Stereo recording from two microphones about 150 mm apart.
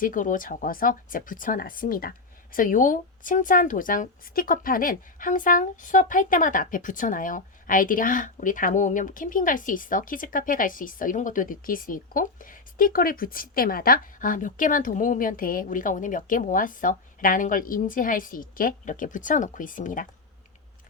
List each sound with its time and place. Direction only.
0.0 s speech: 60° left (ahead or behind)